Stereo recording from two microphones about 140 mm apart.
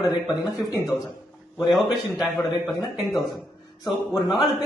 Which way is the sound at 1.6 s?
Centre (ahead or behind).